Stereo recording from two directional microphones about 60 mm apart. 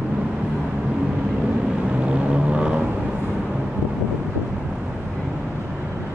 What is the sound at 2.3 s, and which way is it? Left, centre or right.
Vehicle, centre.